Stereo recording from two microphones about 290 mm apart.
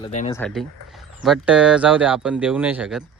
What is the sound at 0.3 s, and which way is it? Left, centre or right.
Speech, centre.